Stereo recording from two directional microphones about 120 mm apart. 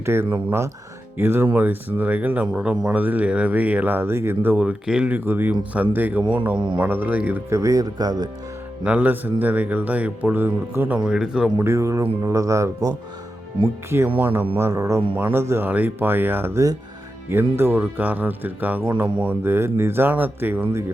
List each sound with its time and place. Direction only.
0.0 s speech: 20° right (ahead or behind)
7.6 s speech: 30° right (ahead or behind)
8.8 s speech: 10° right (ahead or behind)
11.6 s speech: 25° right (ahead or behind)
14.2 s speech: 15° right (ahead or behind)